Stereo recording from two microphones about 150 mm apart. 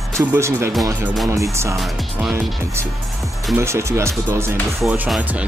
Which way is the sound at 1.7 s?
Centre (ahead or behind).